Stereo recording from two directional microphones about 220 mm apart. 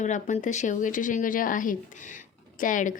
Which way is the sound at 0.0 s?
35° left (ahead or behind).